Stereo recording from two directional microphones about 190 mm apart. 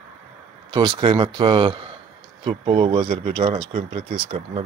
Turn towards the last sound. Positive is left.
turn(degrees=-30)  # may be behind; listen again after turning